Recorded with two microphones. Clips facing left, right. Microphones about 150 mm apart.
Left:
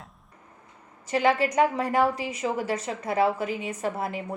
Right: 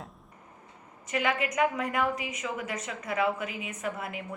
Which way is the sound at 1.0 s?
35° left (ahead or behind).